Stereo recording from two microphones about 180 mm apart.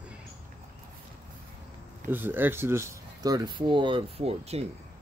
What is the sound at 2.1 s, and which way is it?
Speech, 10° right (ahead or behind).